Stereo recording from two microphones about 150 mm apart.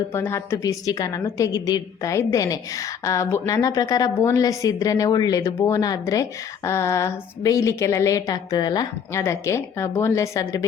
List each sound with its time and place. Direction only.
0.1 s a woman's voice: 15° left (ahead or behind)